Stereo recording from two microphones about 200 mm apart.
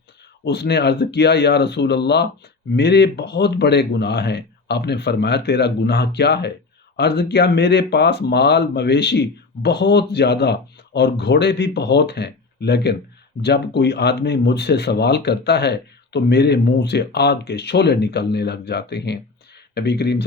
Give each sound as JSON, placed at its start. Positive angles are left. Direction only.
{"t": 0.4, "sound": "speech", "side_deg": 60}